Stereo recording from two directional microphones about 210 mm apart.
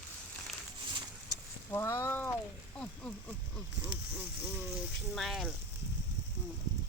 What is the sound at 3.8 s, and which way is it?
Mechanisms, 5° right (ahead or behind).